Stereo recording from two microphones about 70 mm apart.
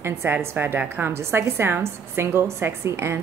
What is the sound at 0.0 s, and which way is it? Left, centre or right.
A woman's voice, right.